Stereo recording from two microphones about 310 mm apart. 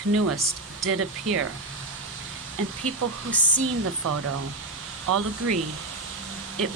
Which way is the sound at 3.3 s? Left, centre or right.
Centre.